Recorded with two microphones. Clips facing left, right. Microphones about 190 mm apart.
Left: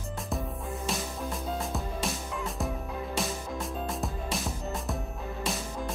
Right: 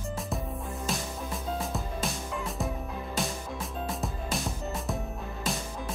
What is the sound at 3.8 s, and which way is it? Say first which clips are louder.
Music: left 1 dB; centre (ahead or behind).